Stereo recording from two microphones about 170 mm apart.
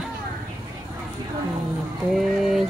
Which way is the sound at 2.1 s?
Centre (ahead or behind).